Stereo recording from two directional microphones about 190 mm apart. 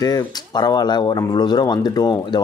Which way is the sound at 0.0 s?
20° left (ahead or behind).